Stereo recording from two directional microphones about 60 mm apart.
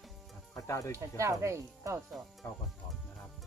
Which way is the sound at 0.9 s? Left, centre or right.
Right.